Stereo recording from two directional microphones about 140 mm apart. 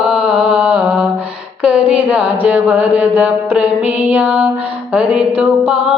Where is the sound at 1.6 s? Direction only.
10° right (ahead or behind).